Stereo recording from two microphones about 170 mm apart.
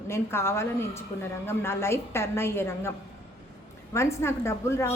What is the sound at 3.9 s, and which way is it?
Speech, 15° left (ahead or behind).